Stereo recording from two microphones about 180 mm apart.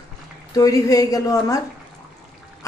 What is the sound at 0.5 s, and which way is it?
Speech, 20° left (ahead or behind).